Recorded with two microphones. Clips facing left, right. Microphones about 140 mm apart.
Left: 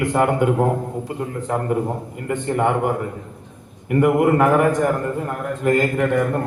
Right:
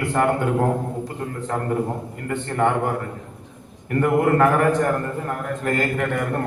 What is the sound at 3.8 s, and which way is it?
A man's voice, 15° left (ahead or behind).